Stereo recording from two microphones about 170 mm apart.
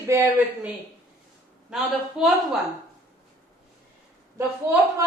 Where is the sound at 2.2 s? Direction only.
Centre (ahead or behind).